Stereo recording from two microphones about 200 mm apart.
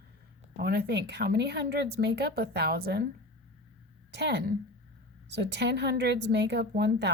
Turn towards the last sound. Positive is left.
turn(degrees=-60)  # may be behind; listen again after turning